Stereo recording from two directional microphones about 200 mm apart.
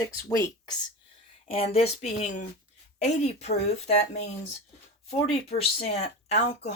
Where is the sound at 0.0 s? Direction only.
15° left (ahead or behind).